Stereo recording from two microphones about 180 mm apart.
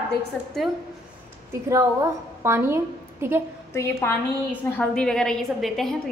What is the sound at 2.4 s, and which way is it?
Speech, 15° right (ahead or behind).